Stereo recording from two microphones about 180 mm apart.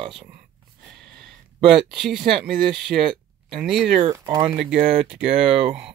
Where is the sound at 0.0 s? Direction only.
30° right (ahead or behind).